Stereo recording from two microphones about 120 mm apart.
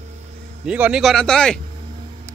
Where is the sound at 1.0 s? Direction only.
5° left (ahead or behind).